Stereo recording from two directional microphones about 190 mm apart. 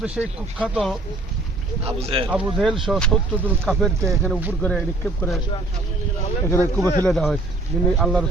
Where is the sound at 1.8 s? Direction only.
30° right (ahead or behind).